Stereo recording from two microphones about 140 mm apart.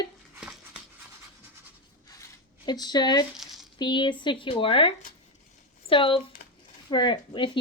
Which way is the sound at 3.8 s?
35° left (ahead or behind).